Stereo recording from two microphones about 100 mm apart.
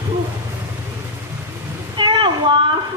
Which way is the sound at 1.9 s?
50° right (ahead or behind).